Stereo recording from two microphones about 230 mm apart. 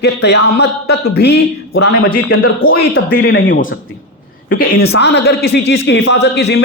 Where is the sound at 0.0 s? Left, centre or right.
Left.